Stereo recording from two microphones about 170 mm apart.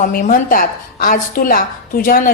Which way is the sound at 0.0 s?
55° left (ahead or behind).